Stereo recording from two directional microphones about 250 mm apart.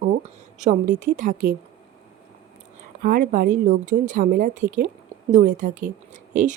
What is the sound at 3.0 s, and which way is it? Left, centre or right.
A woman's voice, right.